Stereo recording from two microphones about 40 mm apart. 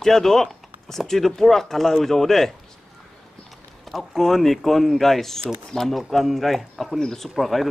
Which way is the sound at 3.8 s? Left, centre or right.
Centre.